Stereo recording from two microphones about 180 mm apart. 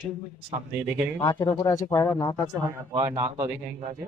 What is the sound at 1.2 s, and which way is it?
Speech, 20° left (ahead or behind).